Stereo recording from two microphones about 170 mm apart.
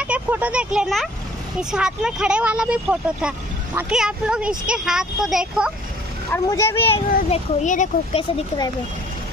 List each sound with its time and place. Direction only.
0.0 s speech: 10° right (ahead or behind)
6.3 s speech: 20° left (ahead or behind)
7.2 s speech: 40° left (ahead or behind)